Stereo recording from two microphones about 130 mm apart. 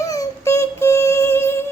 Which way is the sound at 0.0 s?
25° left (ahead or behind).